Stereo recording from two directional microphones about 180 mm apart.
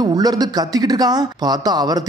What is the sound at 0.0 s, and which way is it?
Speech, 20° right (ahead or behind).